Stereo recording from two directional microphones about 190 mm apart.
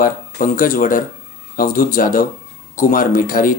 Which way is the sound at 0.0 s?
45° left (ahead or behind).